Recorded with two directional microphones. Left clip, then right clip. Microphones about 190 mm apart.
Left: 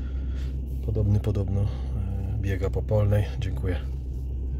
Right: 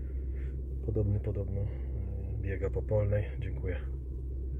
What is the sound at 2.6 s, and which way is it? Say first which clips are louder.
Speech: left 5 dB; 5° left (ahead or behind).